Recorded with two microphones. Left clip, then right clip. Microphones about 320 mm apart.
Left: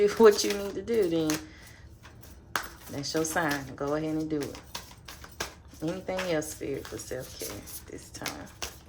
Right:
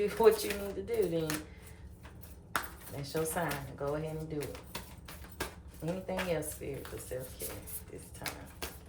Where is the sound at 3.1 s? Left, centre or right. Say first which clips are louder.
Left 6 dB; left.